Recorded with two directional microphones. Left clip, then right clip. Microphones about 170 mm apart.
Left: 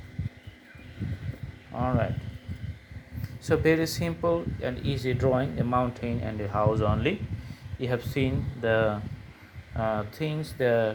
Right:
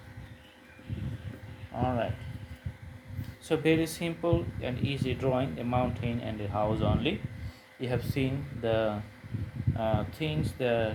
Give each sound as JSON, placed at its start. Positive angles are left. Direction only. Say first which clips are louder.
{"t": 1.7, "sound": "speech", "louder": "left 2 dB", "side_deg": 25}
{"t": 3.5, "sound": "speech", "louder": "left 3 dB", "side_deg": 30}